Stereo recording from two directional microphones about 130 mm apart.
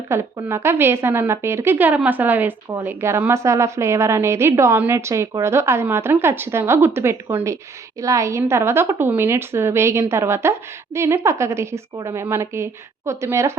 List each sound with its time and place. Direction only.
0.1 s a woman's voice: 20° right (ahead or behind)